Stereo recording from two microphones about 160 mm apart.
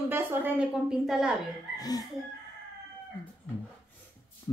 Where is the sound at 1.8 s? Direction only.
25° left (ahead or behind).